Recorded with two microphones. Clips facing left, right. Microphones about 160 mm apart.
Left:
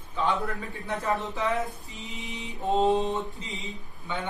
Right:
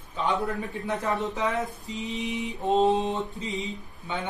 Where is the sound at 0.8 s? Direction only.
20° right (ahead or behind).